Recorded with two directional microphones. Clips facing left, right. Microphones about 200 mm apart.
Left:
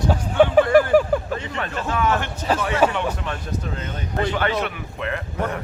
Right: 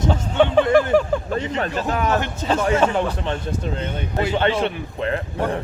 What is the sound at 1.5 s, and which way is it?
A man's voice, 35° right (ahead or behind).